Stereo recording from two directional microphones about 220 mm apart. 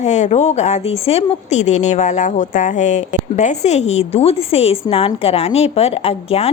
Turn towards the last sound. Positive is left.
turn(degrees=25)  # may be behind; listen again after turning